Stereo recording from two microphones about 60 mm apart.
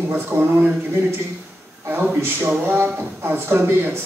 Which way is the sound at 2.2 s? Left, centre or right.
Right.